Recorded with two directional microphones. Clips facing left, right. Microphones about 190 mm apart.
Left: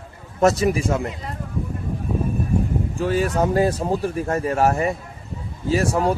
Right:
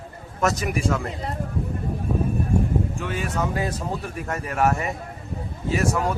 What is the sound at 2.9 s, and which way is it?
Speech, 35° left (ahead or behind).